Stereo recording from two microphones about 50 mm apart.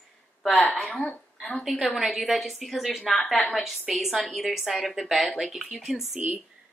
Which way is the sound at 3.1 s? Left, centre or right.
Centre.